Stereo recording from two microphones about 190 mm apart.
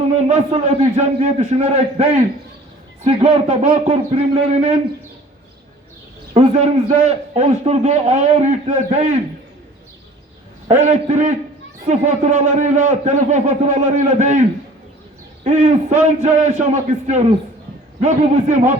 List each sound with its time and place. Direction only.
0.2 s a man's voice: 35° right (ahead or behind)
6.3 s a man's voice: 35° right (ahead or behind)
10.7 s a man's voice: 35° right (ahead or behind)
15.4 s a man's voice: 35° right (ahead or behind)